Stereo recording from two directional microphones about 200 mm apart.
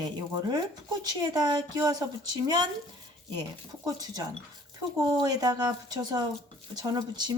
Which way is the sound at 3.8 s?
20° right (ahead or behind).